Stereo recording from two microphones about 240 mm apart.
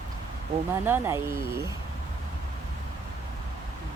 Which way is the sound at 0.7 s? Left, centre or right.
Centre.